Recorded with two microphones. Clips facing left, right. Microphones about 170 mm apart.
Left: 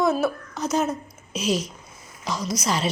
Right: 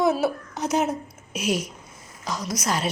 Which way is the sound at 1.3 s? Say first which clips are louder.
Left 1 dB; 55° right (ahead or behind).